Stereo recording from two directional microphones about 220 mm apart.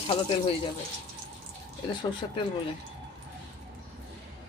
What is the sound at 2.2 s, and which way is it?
Speech, 20° left (ahead or behind).